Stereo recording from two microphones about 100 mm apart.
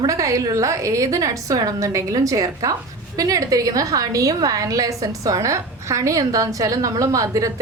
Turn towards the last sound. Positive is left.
turn(degrees=-35)  # may be behind; listen again after turning